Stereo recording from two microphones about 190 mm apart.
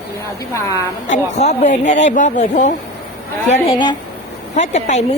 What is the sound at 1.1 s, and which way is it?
Speech, 40° left (ahead or behind).